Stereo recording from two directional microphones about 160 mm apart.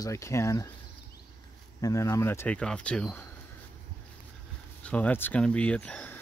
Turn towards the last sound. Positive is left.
turn(degrees=10)  # may be behind; listen again after turning